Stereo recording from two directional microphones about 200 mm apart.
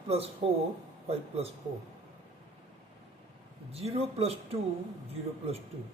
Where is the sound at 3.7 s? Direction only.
30° right (ahead or behind).